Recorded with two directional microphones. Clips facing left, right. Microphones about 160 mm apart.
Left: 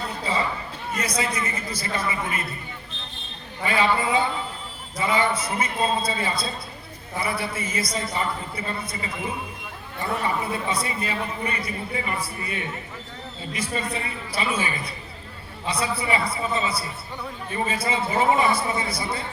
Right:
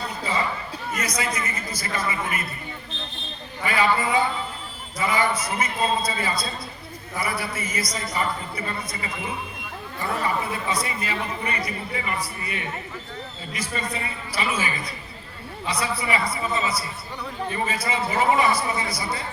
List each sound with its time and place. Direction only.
0.9 s a man's voice: 30° left (ahead or behind)
3.6 s speech: 25° left (ahead or behind)
13.7 s speech: 30° left (ahead or behind)